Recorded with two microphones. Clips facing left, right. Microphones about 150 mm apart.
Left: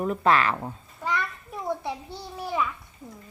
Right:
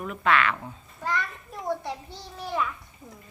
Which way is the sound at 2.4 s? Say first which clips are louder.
Left 1 dB; 5° left (ahead or behind).